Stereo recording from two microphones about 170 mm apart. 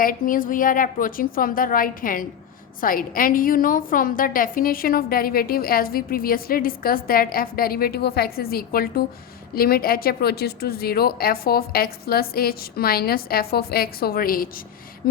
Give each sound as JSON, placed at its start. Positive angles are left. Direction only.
{"t": 0.0, "sound": "a woman's voice", "side_deg": 55}